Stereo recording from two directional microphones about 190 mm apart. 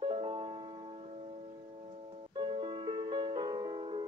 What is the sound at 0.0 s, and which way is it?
Music, 30° right (ahead or behind).